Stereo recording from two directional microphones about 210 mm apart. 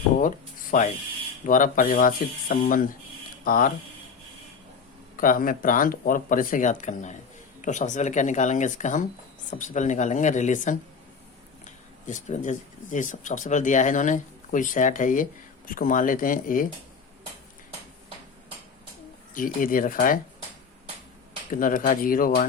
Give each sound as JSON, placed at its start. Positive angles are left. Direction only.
{"t": 0.2, "sound": "speech", "side_deg": 40}
{"t": 5.1, "sound": "speech", "side_deg": 40}
{"t": 19.3, "sound": "speech", "side_deg": 40}
{"t": 21.5, "sound": "speech", "side_deg": 40}